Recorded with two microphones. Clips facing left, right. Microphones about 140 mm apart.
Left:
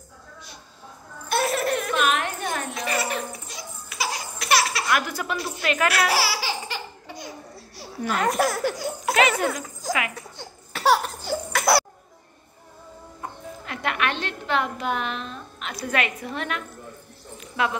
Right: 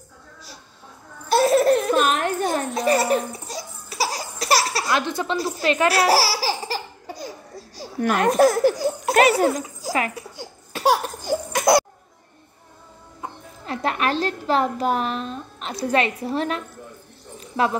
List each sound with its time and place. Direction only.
1.3 s baby laughter: 30° right (ahead or behind)
8.4 s speech: 35° right (ahead or behind)
10.1 s laughter: 10° right (ahead or behind)
13.7 s a woman's voice: 35° right (ahead or behind)
17.4 s a sound: 35° right (ahead or behind)